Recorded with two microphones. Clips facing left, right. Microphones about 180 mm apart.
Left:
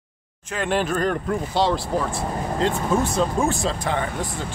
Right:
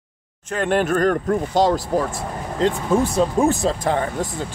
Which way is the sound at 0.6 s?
50° right (ahead or behind).